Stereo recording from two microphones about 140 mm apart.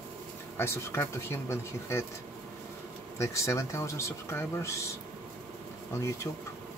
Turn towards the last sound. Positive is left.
turn(degrees=20)  # may be behind; listen again after turning